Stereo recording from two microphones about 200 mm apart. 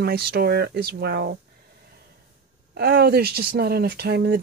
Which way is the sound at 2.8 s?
50° right (ahead or behind).